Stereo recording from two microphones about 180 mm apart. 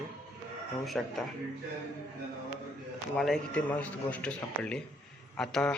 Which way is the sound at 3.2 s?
5° left (ahead or behind).